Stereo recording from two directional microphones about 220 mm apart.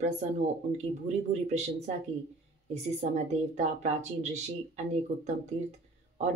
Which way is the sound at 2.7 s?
30° right (ahead or behind).